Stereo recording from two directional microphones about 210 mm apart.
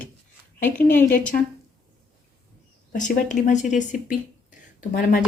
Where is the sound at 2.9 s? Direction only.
35° left (ahead or behind).